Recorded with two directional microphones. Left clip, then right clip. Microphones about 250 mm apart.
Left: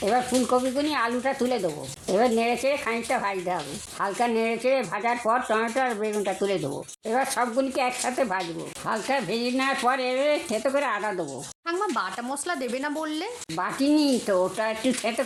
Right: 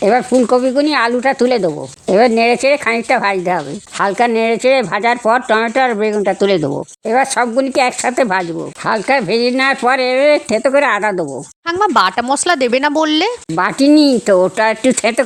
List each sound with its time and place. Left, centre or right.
0.0 s speech: right